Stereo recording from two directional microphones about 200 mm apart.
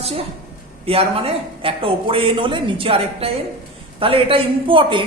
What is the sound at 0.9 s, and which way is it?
Speech, 30° right (ahead or behind).